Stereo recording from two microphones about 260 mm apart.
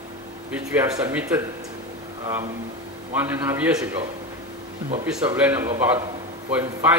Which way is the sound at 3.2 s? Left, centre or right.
Centre.